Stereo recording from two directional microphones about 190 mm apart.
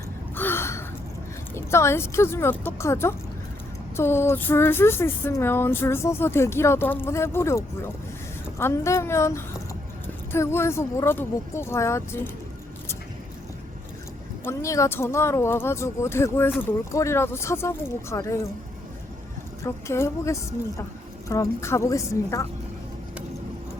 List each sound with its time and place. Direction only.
0.3 s gasp: 10° left (ahead or behind)
1.5 s speech: 15° left (ahead or behind)
14.4 s speech: 15° left (ahead or behind)
19.6 s speech: 15° left (ahead or behind)